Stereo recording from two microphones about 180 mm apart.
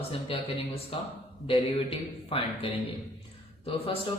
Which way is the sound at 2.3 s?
35° left (ahead or behind).